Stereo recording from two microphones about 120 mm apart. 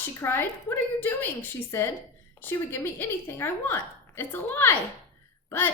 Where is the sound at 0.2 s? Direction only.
20° left (ahead or behind).